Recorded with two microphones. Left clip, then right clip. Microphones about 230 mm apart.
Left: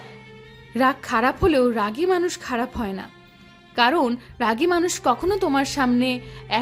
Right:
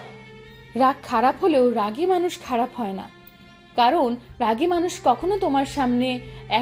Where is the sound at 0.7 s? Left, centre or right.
Centre.